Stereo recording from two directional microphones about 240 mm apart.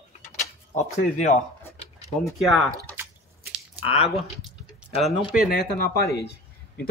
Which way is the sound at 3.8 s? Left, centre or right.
Left.